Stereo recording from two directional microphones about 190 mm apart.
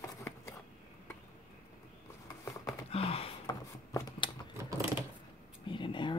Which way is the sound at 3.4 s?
20° left (ahead or behind).